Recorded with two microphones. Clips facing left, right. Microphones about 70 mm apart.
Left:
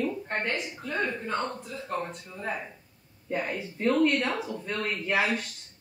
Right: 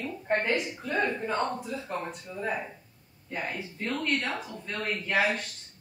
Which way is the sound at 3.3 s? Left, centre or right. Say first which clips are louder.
Left 4 dB; centre.